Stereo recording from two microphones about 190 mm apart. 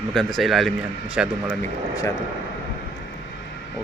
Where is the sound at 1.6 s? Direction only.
15° left (ahead or behind).